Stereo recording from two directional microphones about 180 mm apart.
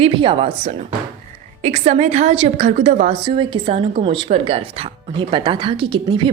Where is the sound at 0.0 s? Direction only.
30° right (ahead or behind).